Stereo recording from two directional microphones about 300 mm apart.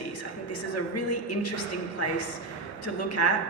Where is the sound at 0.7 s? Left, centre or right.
Left.